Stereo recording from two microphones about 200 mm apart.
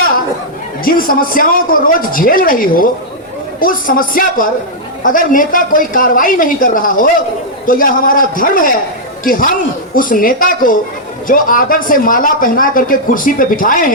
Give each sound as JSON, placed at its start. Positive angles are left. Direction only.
{"t": 0.9, "sound": "speech", "side_deg": 45}